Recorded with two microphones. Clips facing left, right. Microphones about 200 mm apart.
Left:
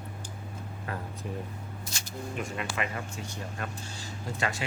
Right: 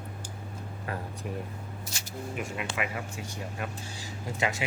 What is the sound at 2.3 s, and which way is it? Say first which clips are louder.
Speech: even; 10° right (ahead or behind).